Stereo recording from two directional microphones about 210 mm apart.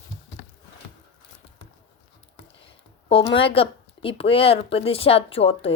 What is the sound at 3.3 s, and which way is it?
Speech, 25° left (ahead or behind).